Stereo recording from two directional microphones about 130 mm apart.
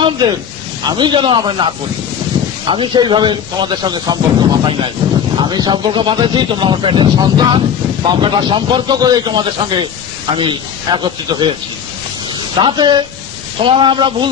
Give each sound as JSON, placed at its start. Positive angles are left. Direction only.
{"t": 0.8, "sound": "speech", "side_deg": -35}
{"t": 2.7, "sound": "speech", "side_deg": -40}
{"t": 12.5, "sound": "speech", "side_deg": -35}